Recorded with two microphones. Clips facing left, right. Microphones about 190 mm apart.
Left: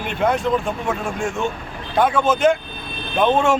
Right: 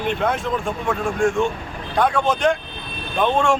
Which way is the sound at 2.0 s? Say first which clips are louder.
Left 2 dB; 5° left (ahead or behind).